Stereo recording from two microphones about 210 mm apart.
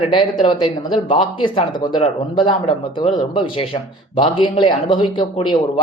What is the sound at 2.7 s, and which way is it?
Speech, 25° left (ahead or behind).